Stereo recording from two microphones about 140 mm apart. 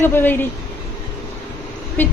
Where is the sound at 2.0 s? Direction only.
10° left (ahead or behind).